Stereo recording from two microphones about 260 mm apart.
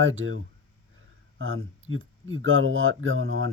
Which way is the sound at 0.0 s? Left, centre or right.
Right.